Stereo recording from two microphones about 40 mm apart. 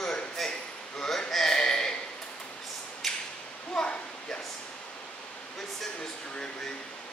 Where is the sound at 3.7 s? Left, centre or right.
Left.